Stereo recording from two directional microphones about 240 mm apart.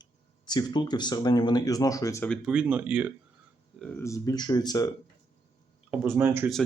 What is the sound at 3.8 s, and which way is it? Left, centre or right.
Speech, centre.